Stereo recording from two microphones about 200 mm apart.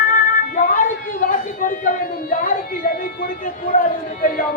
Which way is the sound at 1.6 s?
40° left (ahead or behind).